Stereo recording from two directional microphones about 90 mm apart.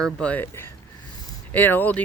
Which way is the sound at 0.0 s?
15° left (ahead or behind).